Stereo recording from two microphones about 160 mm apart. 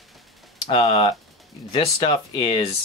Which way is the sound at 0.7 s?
25° left (ahead or behind).